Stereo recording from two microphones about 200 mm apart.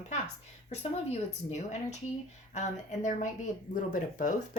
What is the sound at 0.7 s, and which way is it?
Speech, 30° left (ahead or behind).